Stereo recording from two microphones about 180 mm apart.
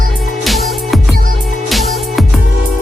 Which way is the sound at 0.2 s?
Centre (ahead or behind).